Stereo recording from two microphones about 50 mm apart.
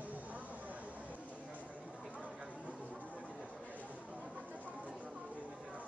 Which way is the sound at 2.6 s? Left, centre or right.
Right.